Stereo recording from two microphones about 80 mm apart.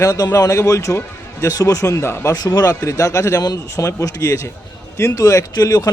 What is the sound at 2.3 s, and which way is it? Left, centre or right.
Speech, left.